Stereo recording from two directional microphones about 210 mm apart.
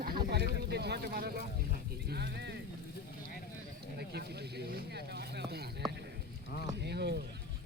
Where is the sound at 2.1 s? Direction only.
50° right (ahead or behind).